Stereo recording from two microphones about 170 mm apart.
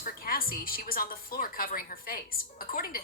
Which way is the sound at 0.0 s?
60° left (ahead or behind).